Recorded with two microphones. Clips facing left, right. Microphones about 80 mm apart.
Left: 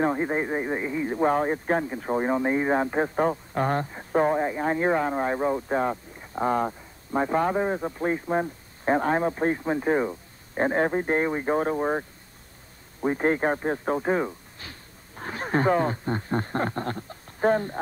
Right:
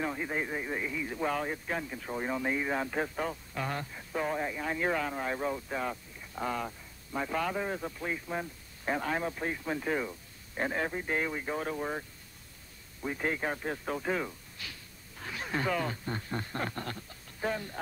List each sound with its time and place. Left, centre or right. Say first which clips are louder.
0.0 s speech: left 9 dB; left